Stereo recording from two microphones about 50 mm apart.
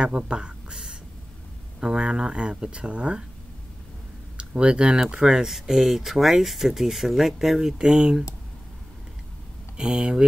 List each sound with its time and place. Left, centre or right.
0.0 s a sound: centre
1.8 s speech: centre
4.4 s speech: right
9.8 s speech: centre